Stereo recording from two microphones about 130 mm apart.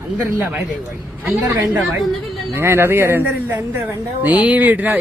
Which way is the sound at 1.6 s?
5° right (ahead or behind).